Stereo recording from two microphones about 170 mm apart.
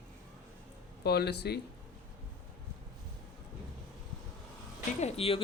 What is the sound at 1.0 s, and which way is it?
Speech, 75° left (ahead or behind).